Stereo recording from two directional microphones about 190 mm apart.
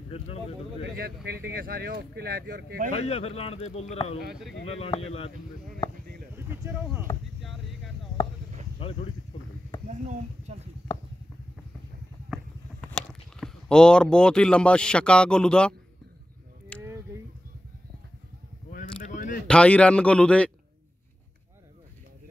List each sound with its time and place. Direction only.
0.9 s speech: 55° right (ahead or behind)
2.9 s speech: 35° left (ahead or behind)
6.3 s speech: 10° right (ahead or behind)
8.7 s speech: 30° left (ahead or behind)
9.8 s speech: 35° right (ahead or behind)
12.9 s speech: 5° left (ahead or behind)
16.8 s a sound: 15° right (ahead or behind)
18.7 s a sound: 45° left (ahead or behind)
19.4 s a man's voice: 5° left (ahead or behind)